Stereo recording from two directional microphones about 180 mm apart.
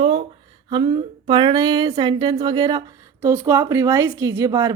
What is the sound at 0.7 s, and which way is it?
A woman's voice, 25° right (ahead or behind).